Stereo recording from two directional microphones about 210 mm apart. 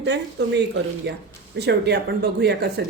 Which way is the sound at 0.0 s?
55° right (ahead or behind).